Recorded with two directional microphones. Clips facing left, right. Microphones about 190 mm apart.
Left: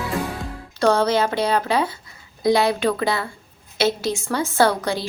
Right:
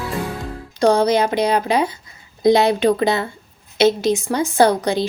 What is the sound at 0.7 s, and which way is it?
A woman's voice, 15° right (ahead or behind).